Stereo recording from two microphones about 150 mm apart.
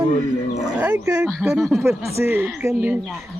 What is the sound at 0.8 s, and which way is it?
Speech, 10° right (ahead or behind).